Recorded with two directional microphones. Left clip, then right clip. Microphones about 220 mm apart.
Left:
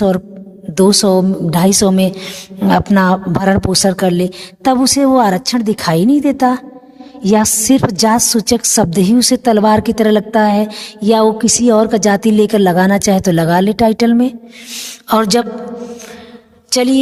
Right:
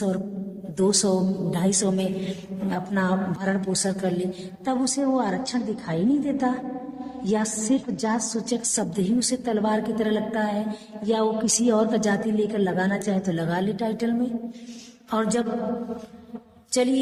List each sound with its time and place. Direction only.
0.8 s a woman's voice: 40° left (ahead or behind)
16.6 s a woman's voice: 45° left (ahead or behind)